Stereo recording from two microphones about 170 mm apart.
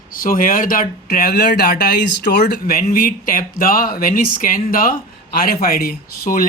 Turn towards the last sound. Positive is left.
turn(degrees=60)  # may be behind; listen again after turning